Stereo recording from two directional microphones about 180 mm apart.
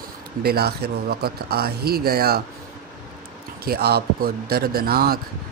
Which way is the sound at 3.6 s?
60° right (ahead or behind).